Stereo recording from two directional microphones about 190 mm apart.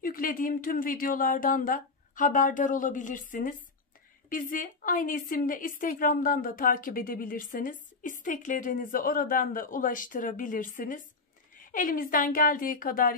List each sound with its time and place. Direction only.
0.0 s a woman's voice: 45° left (ahead or behind)